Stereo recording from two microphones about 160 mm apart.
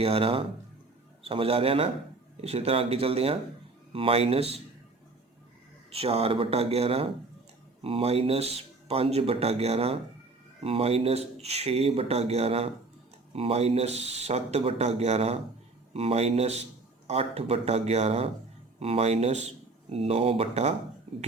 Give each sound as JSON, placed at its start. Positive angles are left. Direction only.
{"t": 0.0, "sound": "speech", "side_deg": -35}
{"t": 5.9, "sound": "speech", "side_deg": -40}